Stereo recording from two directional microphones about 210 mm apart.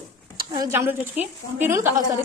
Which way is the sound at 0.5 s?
15° right (ahead or behind).